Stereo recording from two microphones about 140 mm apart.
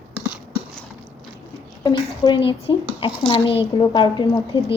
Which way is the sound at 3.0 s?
40° left (ahead or behind).